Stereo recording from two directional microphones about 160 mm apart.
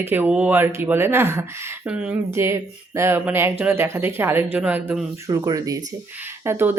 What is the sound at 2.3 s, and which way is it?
Speech, 15° right (ahead or behind).